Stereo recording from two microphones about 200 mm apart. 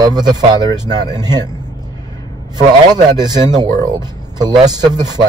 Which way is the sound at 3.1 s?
20° right (ahead or behind).